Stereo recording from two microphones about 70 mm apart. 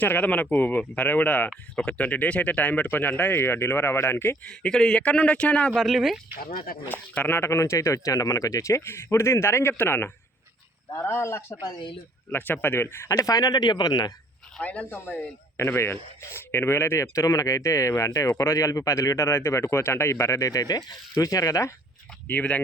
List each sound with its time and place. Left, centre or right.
0.0 s speech: left
4.4 s a man's voice: centre
5.7 s speech: centre
7.3 s speech: left
11.1 s speech: left
12.3 s speech: left
13.1 s speech: left
14.6 s speech: centre
15.5 s speech: left
21.2 s speech: left
22.3 s speech: left